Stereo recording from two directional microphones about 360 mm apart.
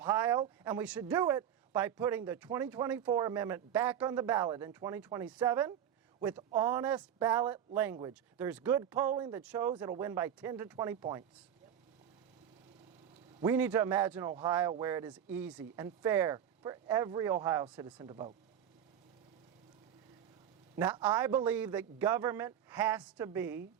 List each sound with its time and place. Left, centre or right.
0.0 s speech: centre
13.4 s speech: centre
20.7 s speech: centre